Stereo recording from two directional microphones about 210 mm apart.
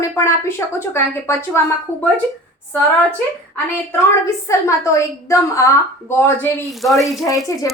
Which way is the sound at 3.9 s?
15° left (ahead or behind).